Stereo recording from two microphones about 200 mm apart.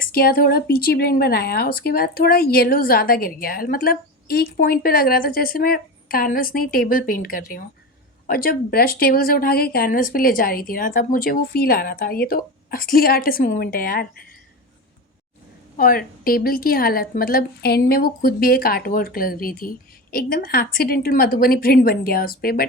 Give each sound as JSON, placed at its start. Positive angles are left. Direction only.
{"t": 0.0, "sound": "speech", "side_deg": 50}
{"t": 15.8, "sound": "speech", "side_deg": 45}